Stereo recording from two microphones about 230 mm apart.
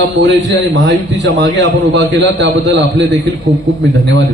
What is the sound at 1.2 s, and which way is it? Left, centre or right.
A man's voice, right.